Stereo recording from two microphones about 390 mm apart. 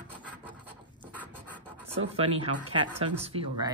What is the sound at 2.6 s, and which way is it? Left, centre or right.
Speech, centre.